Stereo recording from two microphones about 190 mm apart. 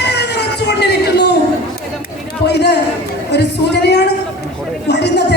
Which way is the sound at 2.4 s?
60° left (ahead or behind).